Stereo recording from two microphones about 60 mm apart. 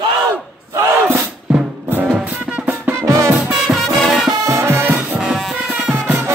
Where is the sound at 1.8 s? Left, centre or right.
Right.